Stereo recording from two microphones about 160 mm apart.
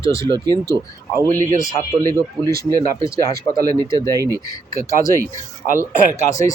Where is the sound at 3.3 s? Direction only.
70° right (ahead or behind).